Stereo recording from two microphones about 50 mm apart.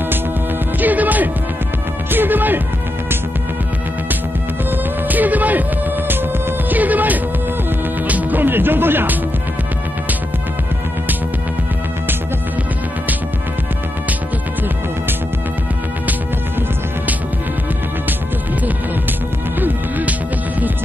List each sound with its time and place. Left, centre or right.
0.7 s music: right
5.0 s music: right
6.7 s music: right